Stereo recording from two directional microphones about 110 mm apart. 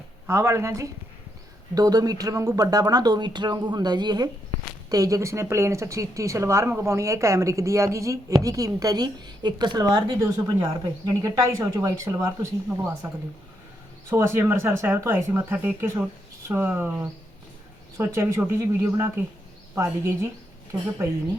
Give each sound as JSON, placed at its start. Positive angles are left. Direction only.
{"t": 0.3, "sound": "speech", "side_deg": -25}
{"t": 14.1, "sound": "speech", "side_deg": -20}